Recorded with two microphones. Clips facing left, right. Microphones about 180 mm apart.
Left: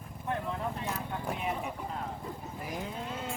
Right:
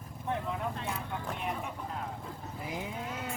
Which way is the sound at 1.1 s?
10° left (ahead or behind).